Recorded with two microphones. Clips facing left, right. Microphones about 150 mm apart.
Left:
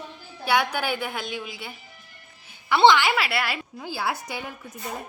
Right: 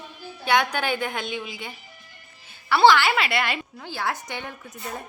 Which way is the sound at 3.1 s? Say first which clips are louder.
Right 1 dB; 5° left (ahead or behind).